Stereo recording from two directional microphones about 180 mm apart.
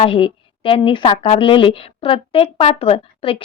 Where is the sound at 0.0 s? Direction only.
30° left (ahead or behind).